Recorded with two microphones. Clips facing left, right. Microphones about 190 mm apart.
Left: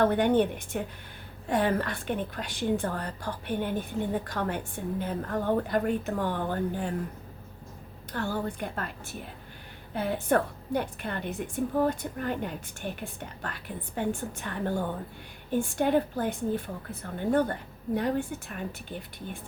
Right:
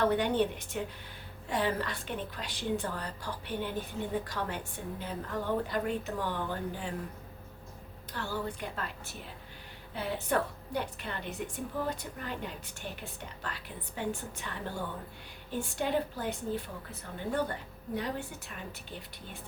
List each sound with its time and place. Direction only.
0.0 s a woman's voice: 55° left (ahead or behind)
8.1 s a woman's voice: 50° left (ahead or behind)